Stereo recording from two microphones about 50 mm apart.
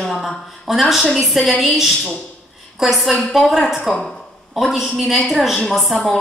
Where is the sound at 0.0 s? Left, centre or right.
Centre.